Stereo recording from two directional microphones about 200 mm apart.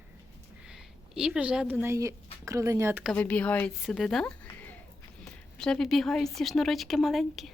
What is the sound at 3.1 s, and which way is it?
A woman's voice, 5° left (ahead or behind).